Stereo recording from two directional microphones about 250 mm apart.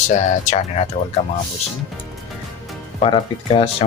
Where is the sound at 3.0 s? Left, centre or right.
Left.